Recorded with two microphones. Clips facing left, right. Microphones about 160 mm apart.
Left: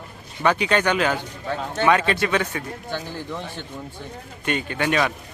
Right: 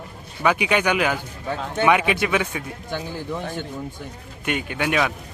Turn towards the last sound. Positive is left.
turn(degrees=-5)  # may be behind; listen again after turning